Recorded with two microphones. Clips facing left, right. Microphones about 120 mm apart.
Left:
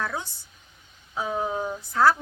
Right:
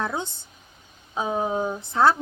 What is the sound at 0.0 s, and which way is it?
A woman's voice, 25° right (ahead or behind).